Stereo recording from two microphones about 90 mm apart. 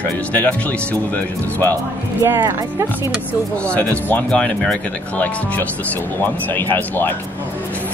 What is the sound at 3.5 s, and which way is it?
Speech, 15° left (ahead or behind).